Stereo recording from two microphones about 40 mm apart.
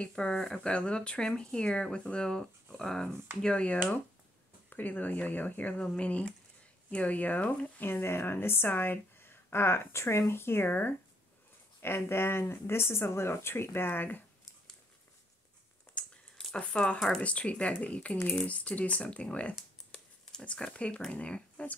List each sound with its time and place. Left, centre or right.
0.1 s speech: left
3.4 s speech: left
4.6 s speech: left
7.8 s speech: left
9.2 s speech: left
10.7 s speech: left
11.8 s speech: left
16.0 s a sound: left
16.5 s speech: left
17.2 s speech: left
20.5 s speech: left